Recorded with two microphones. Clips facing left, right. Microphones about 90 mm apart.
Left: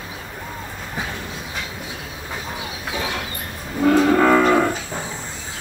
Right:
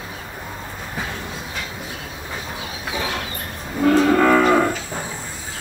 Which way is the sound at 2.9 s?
Centre (ahead or behind).